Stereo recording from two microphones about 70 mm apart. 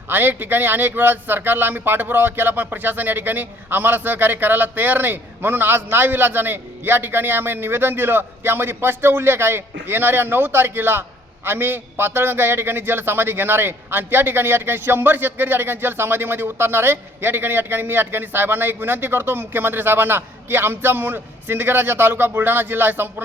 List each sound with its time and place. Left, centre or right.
0.1 s a man's voice: right